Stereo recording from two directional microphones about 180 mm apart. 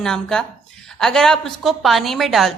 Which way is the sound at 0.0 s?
5° left (ahead or behind).